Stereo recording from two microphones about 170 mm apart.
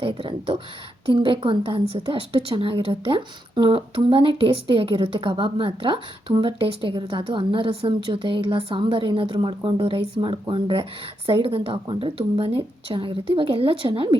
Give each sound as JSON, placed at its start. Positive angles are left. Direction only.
{"t": 0.0, "sound": "a woman's voice", "side_deg": -30}